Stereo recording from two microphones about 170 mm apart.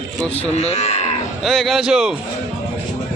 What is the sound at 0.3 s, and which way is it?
Speech, 40° left (ahead or behind).